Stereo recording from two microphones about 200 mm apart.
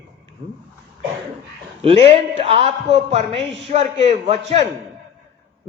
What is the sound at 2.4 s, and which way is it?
A man's voice, 30° right (ahead or behind).